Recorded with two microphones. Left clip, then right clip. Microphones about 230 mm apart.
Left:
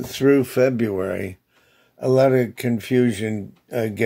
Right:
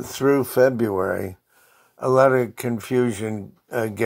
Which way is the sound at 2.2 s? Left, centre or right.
Centre.